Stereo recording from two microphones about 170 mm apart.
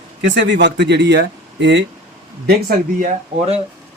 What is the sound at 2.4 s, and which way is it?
Speech, 55° right (ahead or behind).